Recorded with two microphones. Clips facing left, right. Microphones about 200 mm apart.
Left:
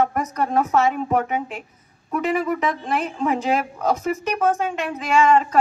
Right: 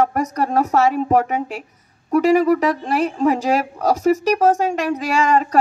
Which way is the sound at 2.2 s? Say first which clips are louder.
Right 7 dB; 40° right (ahead or behind).